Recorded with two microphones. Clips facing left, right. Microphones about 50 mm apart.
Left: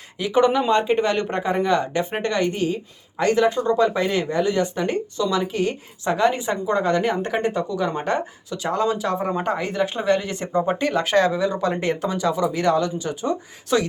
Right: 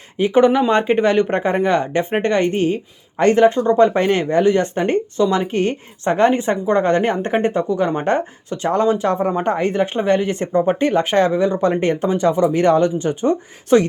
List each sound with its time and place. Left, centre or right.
0.2 s speech: right
3.8 s speech: right
9.1 s speech: right
9.4 s speech: right